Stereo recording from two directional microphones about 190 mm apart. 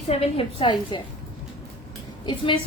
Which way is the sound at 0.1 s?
30° left (ahead or behind).